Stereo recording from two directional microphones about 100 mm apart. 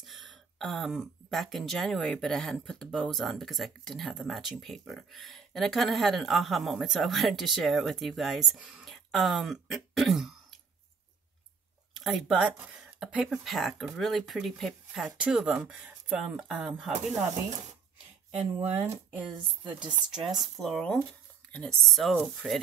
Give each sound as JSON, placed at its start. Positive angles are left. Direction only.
{"t": 0.0, "sound": "speech", "side_deg": 0}
{"t": 11.9, "sound": "speech", "side_deg": 0}
{"t": 18.6, "sound": "speech", "side_deg": -20}
{"t": 20.1, "sound": "speech", "side_deg": -5}